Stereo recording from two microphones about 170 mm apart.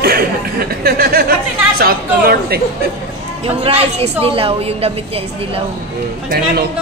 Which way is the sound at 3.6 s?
35° right (ahead or behind).